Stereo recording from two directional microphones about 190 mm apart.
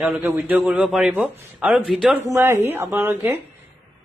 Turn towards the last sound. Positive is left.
turn(degrees=-10)  # may be behind; listen again after turning